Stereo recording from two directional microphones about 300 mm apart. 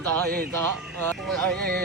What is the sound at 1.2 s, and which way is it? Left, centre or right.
Speech, centre.